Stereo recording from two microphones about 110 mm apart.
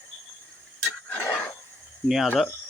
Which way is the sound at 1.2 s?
15° left (ahead or behind).